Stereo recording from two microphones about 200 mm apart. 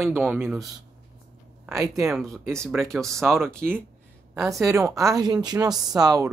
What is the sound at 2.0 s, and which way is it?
Speech, centre (ahead or behind).